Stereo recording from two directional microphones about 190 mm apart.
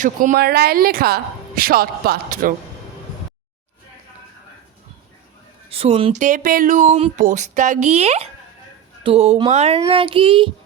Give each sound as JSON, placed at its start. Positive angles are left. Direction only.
{"t": 0.0, "sound": "speech", "side_deg": -45}
{"t": 5.7, "sound": "a child's voice", "side_deg": -30}